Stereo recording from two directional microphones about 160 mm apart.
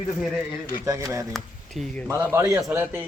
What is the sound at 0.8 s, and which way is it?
Speech, 20° right (ahead or behind).